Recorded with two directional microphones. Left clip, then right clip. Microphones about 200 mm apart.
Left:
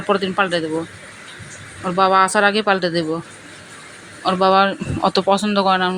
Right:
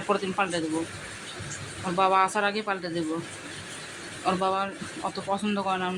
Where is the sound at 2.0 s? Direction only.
25° left (ahead or behind).